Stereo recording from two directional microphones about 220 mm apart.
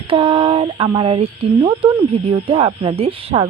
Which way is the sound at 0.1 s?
25° right (ahead or behind).